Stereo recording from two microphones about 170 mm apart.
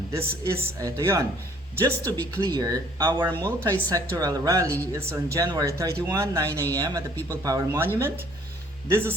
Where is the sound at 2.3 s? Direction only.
20° right (ahead or behind).